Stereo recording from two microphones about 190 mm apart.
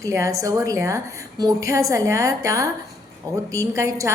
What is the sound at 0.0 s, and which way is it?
A woman's voice, 15° right (ahead or behind).